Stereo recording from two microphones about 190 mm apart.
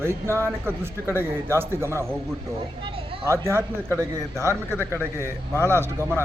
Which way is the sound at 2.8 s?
30° right (ahead or behind).